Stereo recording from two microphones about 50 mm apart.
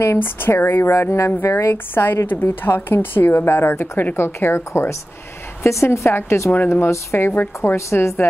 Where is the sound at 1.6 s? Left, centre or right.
Left.